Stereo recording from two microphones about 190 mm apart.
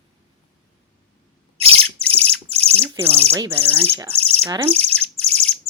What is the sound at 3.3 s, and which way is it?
Speech, 10° right (ahead or behind).